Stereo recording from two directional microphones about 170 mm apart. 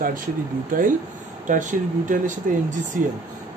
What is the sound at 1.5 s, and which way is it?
Speech, 50° right (ahead or behind).